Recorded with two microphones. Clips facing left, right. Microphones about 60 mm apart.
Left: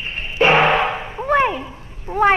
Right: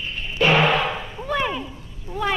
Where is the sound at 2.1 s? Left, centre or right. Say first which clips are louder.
Left 10 dB; left.